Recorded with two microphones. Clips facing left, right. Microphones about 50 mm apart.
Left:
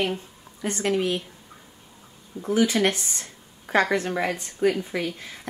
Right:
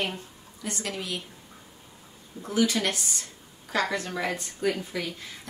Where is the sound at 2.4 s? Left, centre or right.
Left.